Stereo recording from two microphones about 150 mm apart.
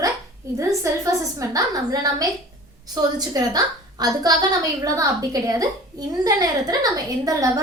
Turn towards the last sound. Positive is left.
turn(degrees=-25)  # may be behind; listen again after turning